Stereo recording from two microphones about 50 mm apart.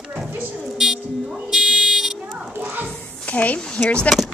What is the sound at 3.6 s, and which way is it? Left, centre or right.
Speech, centre.